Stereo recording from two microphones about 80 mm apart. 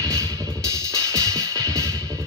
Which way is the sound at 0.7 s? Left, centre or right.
Right.